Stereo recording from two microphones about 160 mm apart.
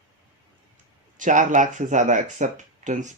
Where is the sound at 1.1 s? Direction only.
50° right (ahead or behind).